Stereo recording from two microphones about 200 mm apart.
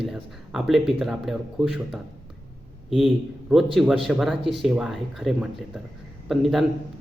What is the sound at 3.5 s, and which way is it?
Speech, centre (ahead or behind).